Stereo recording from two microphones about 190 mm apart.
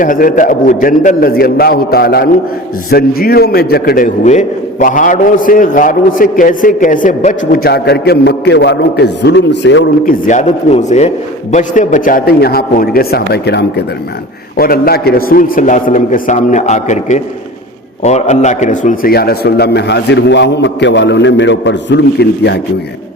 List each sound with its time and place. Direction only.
0.0 s a man's voice: 45° left (ahead or behind)
7.6 s a man's voice: 60° left (ahead or behind)
10.1 s a man's voice: 40° left (ahead or behind); by 13.8 s 60° left (ahead or behind)
14.5 s a man's voice: 50° left (ahead or behind)